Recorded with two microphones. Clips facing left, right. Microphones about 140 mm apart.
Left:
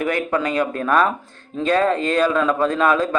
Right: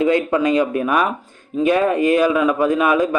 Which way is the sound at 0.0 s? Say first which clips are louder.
Right 5 dB; 20° right (ahead or behind).